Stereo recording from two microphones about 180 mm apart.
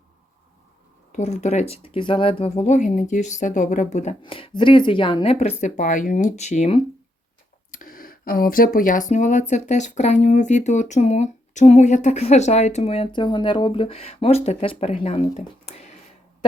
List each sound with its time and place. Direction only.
1.1 s speech: 40° left (ahead or behind)
4.2 s speech: 30° left (ahead or behind)
7.7 s speech: 50° left (ahead or behind)